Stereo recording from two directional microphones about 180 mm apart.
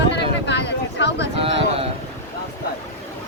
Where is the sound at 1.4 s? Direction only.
30° right (ahead or behind).